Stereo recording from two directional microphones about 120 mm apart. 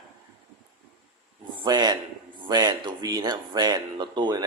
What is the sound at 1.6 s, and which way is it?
Speech, 35° right (ahead or behind).